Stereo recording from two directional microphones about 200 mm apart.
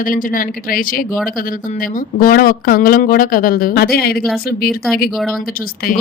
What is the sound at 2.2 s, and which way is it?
Speech, 45° left (ahead or behind).